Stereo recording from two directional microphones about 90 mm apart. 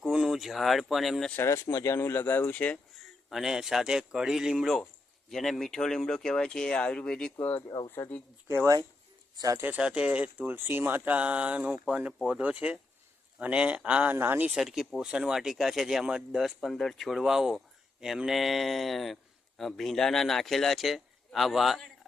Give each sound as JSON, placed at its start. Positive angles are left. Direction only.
{"t": 0.0, "sound": "speech", "side_deg": -5}
{"t": 1.4, "sound": "speech", "side_deg": 30}
{"t": 2.9, "sound": "a man's voice", "side_deg": 0}
{"t": 7.3, "sound": "speech", "side_deg": 20}
{"t": 8.4, "sound": "speech", "side_deg": -30}
{"t": 9.3, "sound": "speech", "side_deg": -40}
{"t": 9.6, "sound": "speech", "side_deg": -20}
{"t": 14.5, "sound": "a man's voice", "side_deg": -5}